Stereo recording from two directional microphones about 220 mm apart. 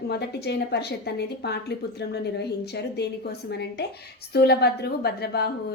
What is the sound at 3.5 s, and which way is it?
A woman's voice, 50° left (ahead or behind).